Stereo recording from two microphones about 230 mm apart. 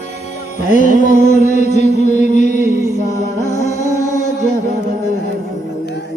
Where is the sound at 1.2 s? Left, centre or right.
Left.